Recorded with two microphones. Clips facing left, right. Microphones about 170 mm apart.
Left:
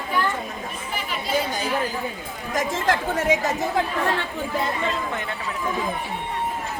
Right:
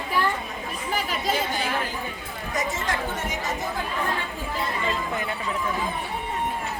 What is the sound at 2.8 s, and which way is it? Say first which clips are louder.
Speech: left 7 dB; 65° left (ahead or behind).